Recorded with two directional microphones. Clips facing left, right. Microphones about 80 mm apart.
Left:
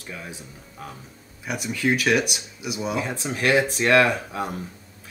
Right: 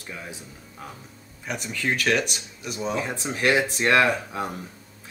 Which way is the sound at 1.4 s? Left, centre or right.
Centre.